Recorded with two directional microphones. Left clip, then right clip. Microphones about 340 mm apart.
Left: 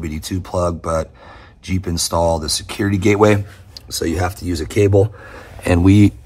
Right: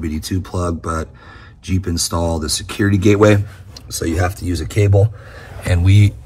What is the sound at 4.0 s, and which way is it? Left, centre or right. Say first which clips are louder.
Speech: even; centre.